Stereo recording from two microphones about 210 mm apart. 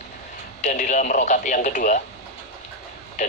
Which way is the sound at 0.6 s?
35° left (ahead or behind).